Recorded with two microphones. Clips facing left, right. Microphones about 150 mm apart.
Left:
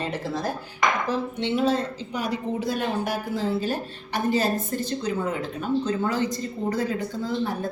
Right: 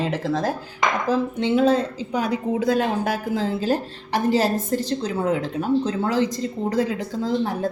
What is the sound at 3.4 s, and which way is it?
A woman's voice, 90° right.